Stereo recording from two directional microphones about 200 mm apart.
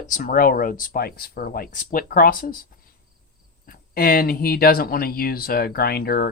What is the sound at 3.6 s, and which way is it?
Speech, 50° left (ahead or behind).